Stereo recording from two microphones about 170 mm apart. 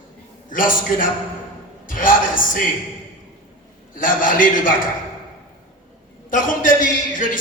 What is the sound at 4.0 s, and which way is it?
Speech, 55° left (ahead or behind).